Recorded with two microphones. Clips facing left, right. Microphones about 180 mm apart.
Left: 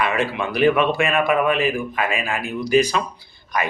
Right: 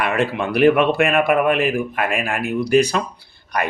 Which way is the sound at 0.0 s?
65° right (ahead or behind).